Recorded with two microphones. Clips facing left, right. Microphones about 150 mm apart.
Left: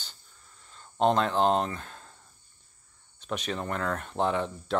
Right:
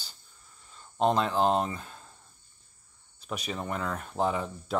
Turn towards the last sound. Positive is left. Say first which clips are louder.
# left 2 dB
turn(degrees=-5)  # may be behind; listen again after turning